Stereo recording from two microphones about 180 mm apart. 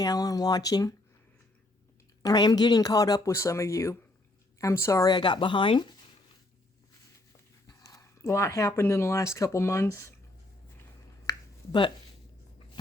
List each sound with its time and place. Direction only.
0.0 s speech: 20° left (ahead or behind)
2.2 s speech: 20° left (ahead or behind)
7.7 s speech: 20° left (ahead or behind)
11.3 s finger snapping: 25° left (ahead or behind)